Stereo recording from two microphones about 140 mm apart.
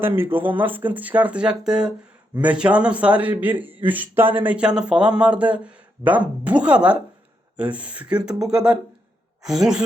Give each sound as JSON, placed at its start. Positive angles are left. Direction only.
{"t": 0.0, "sound": "a woman's voice", "side_deg": -15}